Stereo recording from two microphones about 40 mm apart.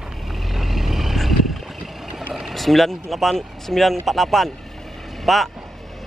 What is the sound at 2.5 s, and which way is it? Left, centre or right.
Speech, centre.